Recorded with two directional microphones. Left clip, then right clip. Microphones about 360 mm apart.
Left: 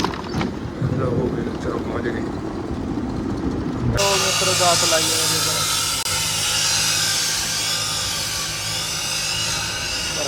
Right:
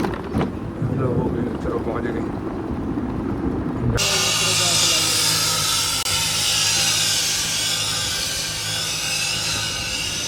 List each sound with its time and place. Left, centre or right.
3.9 s speech: centre